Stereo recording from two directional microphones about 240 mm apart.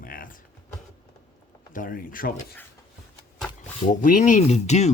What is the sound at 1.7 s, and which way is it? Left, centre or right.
Speech, left.